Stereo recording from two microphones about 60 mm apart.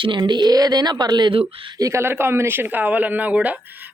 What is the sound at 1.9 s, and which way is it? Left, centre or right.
Speech, right.